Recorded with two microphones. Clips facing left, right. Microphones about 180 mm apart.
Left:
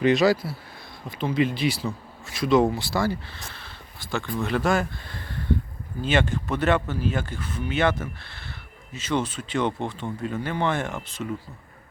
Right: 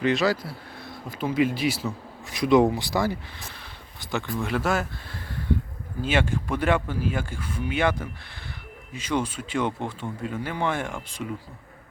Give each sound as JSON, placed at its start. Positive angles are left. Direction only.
{"t": 0.0, "sound": "speech", "side_deg": 15}
{"t": 1.0, "sound": "speech", "side_deg": -10}
{"t": 2.3, "sound": "speech", "side_deg": -15}